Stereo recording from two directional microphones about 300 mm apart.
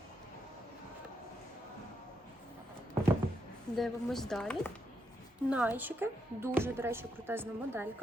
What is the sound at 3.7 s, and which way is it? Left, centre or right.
Speech, centre.